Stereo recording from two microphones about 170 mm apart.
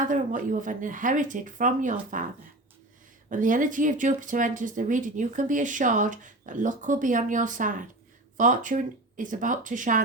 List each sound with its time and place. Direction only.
0.0 s speech: 50° right (ahead or behind)
3.2 s speech: 50° right (ahead or behind)